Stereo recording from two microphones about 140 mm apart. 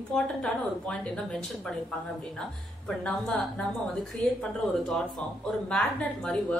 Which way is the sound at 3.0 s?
5° left (ahead or behind).